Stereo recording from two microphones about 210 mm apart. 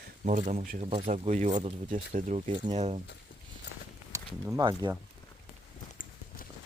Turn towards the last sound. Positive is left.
turn(degrees=40)  # may be behind; listen again after turning